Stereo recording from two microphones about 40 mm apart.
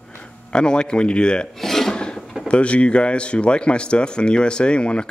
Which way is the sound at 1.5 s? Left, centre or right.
Centre.